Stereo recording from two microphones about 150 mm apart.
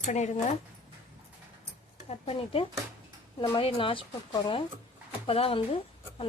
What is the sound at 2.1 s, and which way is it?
Speech, 40° left (ahead or behind).